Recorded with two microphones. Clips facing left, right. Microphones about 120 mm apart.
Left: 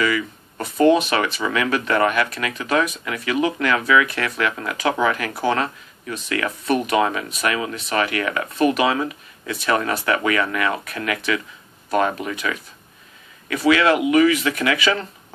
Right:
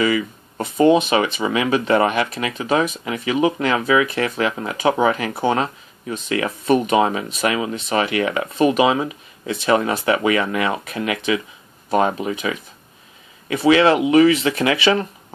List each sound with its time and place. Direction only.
0.0 s speech: 25° right (ahead or behind)